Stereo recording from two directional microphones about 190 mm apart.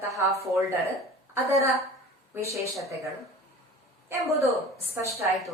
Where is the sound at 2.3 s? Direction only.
15° right (ahead or behind).